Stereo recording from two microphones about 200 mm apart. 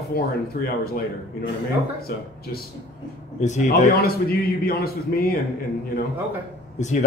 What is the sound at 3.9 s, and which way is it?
A man's voice, 50° left (ahead or behind).